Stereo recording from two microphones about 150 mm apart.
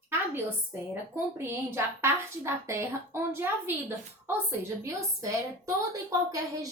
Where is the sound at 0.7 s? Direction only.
15° right (ahead or behind).